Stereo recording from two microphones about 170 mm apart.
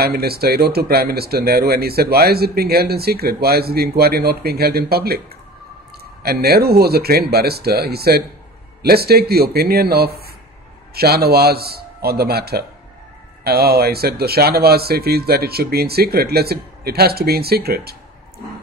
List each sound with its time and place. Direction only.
0.0 s speech: 65° right (ahead or behind)
6.2 s speech: 65° right (ahead or behind)